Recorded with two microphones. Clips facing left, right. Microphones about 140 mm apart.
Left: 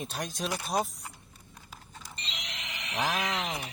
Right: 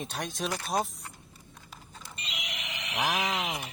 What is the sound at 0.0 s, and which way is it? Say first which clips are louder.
Speech: right 1 dB; centre (ahead or behind).